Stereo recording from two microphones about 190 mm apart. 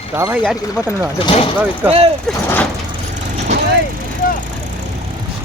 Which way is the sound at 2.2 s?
5° left (ahead or behind).